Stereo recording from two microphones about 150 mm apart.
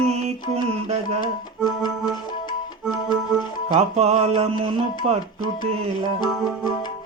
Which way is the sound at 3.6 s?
45° right (ahead or behind).